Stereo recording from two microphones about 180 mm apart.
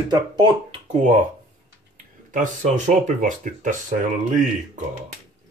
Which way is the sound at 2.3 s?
45° right (ahead or behind).